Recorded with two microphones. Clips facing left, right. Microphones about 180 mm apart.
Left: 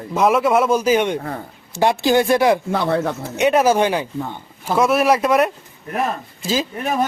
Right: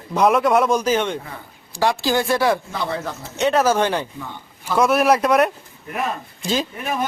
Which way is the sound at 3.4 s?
10° left (ahead or behind).